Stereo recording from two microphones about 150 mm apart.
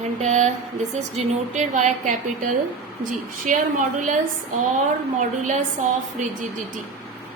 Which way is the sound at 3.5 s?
65° right (ahead or behind).